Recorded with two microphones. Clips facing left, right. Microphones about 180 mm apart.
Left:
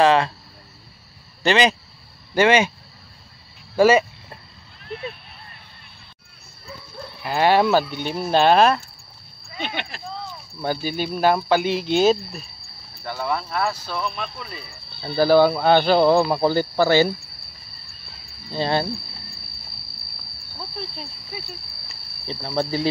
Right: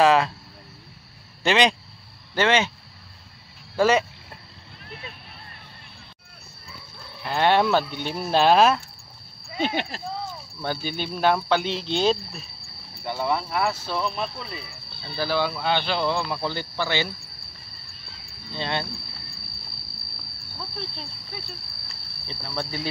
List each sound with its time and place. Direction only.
0.0 s speech: centre (ahead or behind)
1.4 s speech: centre (ahead or behind)
3.7 s speech: 10° left (ahead or behind)
7.2 s speech: 5° left (ahead or behind)
9.6 s speech: 40° right (ahead or behind)
10.6 s speech: 10° left (ahead or behind)
13.0 s speech: 25° right (ahead or behind)
15.1 s speech: 45° left (ahead or behind)
18.5 s speech: 35° left (ahead or behind)
20.7 s cricket: 5° left (ahead or behind)
22.3 s speech: 30° left (ahead or behind)